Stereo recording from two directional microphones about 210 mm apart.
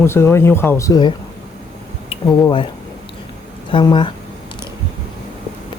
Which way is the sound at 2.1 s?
25° left (ahead or behind).